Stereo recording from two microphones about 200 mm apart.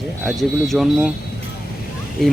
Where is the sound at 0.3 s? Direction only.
Centre (ahead or behind).